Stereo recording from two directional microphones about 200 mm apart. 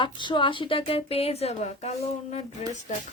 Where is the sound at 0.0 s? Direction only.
25° left (ahead or behind).